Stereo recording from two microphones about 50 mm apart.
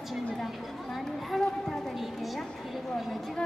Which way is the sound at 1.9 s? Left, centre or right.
Centre.